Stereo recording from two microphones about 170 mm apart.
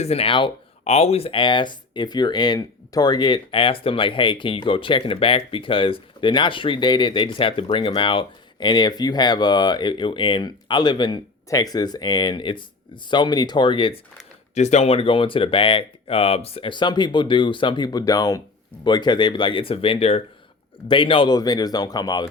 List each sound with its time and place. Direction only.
0.0 s speech: 35° left (ahead or behind)
14.5 s speech: 40° left (ahead or behind); by 22.3 s 25° left (ahead or behind)